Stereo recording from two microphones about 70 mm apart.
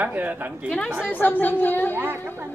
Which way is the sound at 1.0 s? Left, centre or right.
Left.